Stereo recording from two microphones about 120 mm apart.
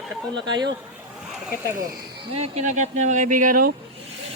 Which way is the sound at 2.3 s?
65° right (ahead or behind).